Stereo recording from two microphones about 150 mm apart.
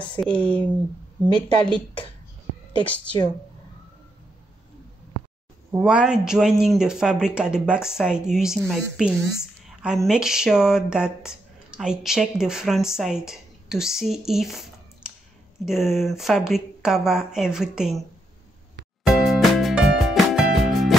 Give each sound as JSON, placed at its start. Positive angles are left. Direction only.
{"t": 0.2, "sound": "speech", "side_deg": 10}
{"t": 1.2, "sound": "a woman's voice", "side_deg": -35}
{"t": 2.8, "sound": "speech", "side_deg": 10}
{"t": 5.7, "sound": "a woman's voice", "side_deg": -10}
{"t": 19.0, "sound": "music", "side_deg": 0}